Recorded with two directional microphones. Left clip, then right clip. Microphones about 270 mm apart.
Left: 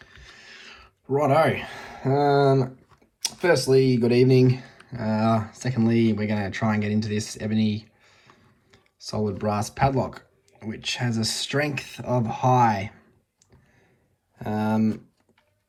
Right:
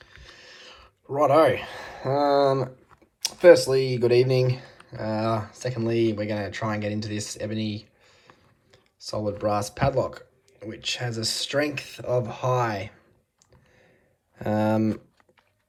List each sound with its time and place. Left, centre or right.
0.0 s speech: centre
14.3 s speech: right